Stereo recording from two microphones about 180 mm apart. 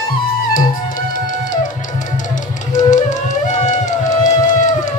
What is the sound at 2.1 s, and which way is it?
Music, 45° left (ahead or behind).